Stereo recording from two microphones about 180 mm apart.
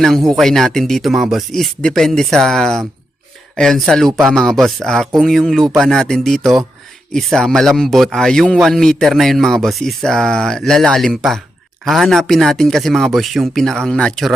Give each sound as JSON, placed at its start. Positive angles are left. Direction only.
{"t": 0.0, "sound": "speech", "side_deg": 0}